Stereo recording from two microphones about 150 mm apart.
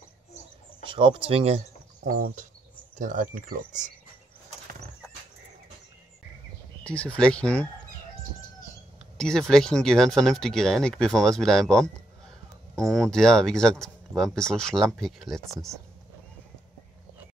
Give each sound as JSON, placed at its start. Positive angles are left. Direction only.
{"t": 0.8, "sound": "speech", "side_deg": -35}
{"t": 2.0, "sound": "speech", "side_deg": -65}
{"t": 6.8, "sound": "speech", "side_deg": 10}
{"t": 9.2, "sound": "speech", "side_deg": 5}